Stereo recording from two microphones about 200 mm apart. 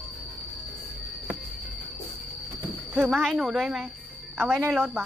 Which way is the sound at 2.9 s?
Centre (ahead or behind).